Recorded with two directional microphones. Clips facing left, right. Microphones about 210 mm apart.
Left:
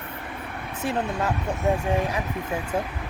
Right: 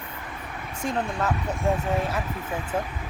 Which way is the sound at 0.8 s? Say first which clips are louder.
Left 1 dB; 10° left (ahead or behind).